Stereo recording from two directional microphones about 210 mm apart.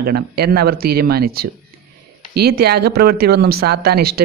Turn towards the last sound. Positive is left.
turn(degrees=-50)  # may be behind; listen again after turning